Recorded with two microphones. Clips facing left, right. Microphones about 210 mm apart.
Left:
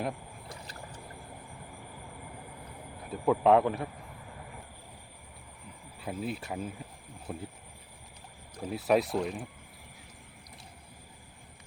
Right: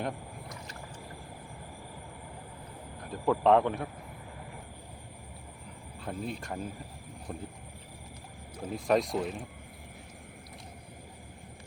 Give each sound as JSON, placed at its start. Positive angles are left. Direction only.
{"t": 0.4, "sound": "boat", "side_deg": 30}
{"t": 3.1, "sound": "speech", "side_deg": 5}
{"t": 6.0, "sound": "speech", "side_deg": 5}
{"t": 8.7, "sound": "speech", "side_deg": 5}